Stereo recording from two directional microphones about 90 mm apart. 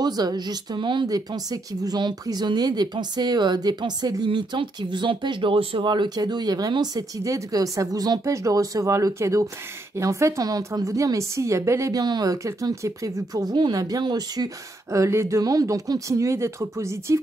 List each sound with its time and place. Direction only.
0.0 s speech: 50° right (ahead or behind)
1.0 s speech: 45° right (ahead or behind); by 5.9 s 85° right
5.9 s speech: 50° right (ahead or behind)
12.4 s speech: 35° right (ahead or behind)